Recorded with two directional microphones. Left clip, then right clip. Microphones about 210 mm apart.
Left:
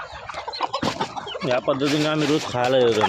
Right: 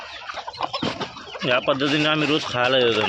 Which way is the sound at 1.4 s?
10° left (ahead or behind).